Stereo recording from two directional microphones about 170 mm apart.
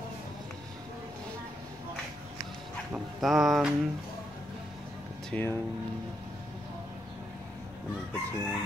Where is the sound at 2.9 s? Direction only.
Centre (ahead or behind).